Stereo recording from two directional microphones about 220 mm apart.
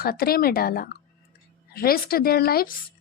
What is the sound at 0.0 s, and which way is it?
Speech, 45° left (ahead or behind).